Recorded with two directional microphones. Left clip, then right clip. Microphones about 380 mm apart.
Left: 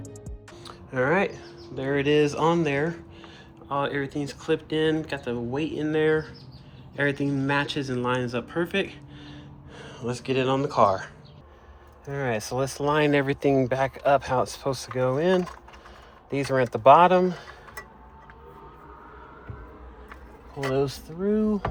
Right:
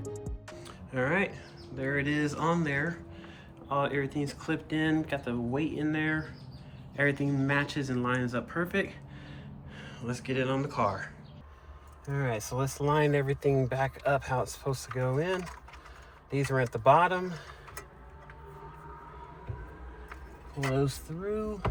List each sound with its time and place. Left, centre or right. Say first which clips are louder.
0.0 s music: right 3 dB; centre
3.7 s speech: left 3 dB; centre
12.0 s speech: left 6 dB; left
20.7 s speech: left 7 dB; centre